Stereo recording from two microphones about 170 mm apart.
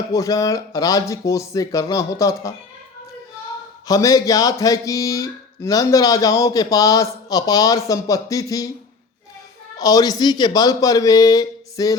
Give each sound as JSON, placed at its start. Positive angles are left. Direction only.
{"t": 0.1, "sound": "speech", "side_deg": 20}
{"t": 3.8, "sound": "speech", "side_deg": 20}
{"t": 9.7, "sound": "speech", "side_deg": 20}